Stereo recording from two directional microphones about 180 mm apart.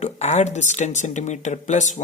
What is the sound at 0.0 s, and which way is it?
Speech, 35° left (ahead or behind).